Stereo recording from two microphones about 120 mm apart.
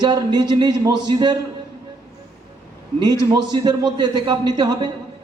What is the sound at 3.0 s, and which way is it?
A man's voice, 35° right (ahead or behind).